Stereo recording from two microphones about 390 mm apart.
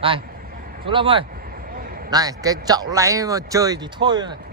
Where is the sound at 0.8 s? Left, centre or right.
Centre.